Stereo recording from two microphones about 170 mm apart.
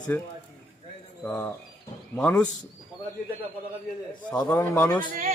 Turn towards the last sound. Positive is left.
turn(degrees=-55)  # may be behind; listen again after turning